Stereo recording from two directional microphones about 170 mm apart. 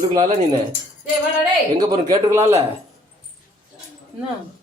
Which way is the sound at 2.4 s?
40° right (ahead or behind).